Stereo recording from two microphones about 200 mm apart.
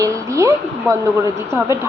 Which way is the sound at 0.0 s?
15° right (ahead or behind).